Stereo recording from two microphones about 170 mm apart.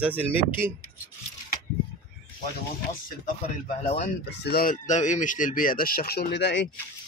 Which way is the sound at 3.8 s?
35° left (ahead or behind).